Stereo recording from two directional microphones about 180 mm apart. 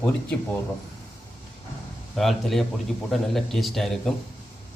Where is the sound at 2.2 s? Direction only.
Centre (ahead or behind).